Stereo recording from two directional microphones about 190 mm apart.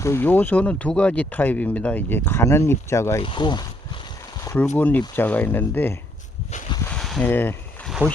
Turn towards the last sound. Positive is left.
turn(degrees=10)  # may be behind; listen again after turning